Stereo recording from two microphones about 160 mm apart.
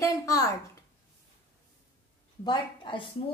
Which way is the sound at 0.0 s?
20° left (ahead or behind).